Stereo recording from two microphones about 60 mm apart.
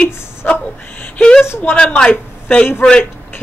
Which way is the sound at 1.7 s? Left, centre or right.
Centre.